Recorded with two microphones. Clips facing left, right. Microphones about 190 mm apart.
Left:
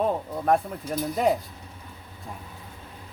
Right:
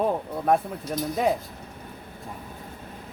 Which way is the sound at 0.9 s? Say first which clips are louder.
Left 1 dB; 5° left (ahead or behind).